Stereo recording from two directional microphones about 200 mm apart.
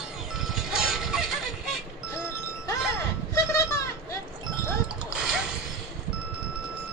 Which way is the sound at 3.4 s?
15° left (ahead or behind).